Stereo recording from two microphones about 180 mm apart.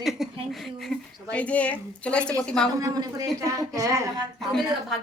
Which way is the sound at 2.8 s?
20° right (ahead or behind).